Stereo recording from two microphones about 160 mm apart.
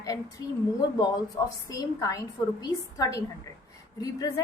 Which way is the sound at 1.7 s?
20° left (ahead or behind).